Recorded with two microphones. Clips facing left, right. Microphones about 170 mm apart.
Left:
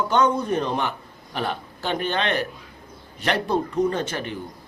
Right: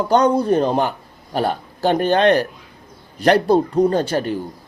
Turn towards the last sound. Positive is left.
turn(degrees=-35)  # may be behind; listen again after turning